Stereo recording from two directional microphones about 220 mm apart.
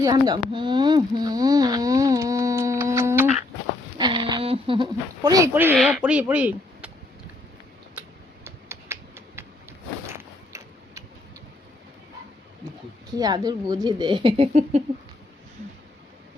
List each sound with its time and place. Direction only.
0.0 s a sound: 20° right (ahead or behind)
5.7 s speech: 5° right (ahead or behind)
8.4 s computer keyboard: 10° right (ahead or behind)
10.1 s gears: 15° right (ahead or behind)
13.1 s speech: 15° right (ahead or behind)